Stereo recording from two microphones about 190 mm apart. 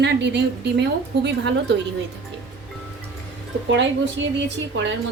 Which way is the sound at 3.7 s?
70° right (ahead or behind).